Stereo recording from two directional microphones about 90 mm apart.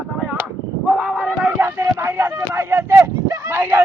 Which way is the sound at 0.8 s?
10° right (ahead or behind).